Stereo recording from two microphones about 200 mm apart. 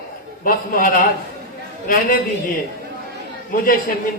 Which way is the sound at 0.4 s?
45° left (ahead or behind).